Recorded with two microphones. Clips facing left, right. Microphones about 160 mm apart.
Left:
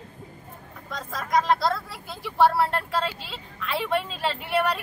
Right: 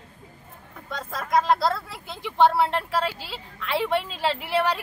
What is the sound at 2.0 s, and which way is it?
Speech, 20° right (ahead or behind).